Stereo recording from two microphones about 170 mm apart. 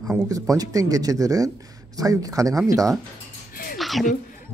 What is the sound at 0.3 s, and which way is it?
Speech, 20° right (ahead or behind).